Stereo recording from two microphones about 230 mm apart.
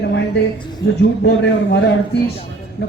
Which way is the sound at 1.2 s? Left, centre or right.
Left.